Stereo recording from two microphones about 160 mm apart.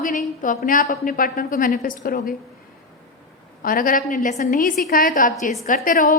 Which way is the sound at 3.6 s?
60° left (ahead or behind).